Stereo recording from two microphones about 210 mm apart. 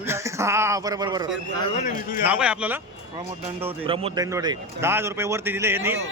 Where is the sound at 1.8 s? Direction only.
35° left (ahead or behind).